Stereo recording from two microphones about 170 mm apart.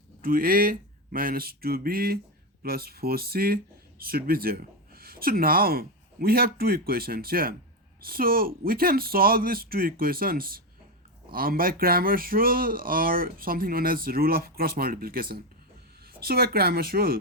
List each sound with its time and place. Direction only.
0.2 s speech: 60° right (ahead or behind)